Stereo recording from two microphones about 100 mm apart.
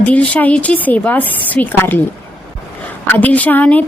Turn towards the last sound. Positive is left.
turn(degrees=15)  # may be behind; listen again after turning